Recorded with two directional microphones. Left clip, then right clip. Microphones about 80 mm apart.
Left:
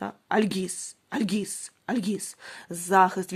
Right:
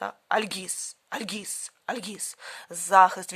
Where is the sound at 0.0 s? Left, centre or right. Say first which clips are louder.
Even; right.